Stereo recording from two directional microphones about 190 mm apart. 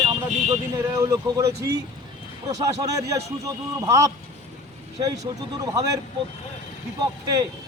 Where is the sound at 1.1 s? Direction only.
15° right (ahead or behind).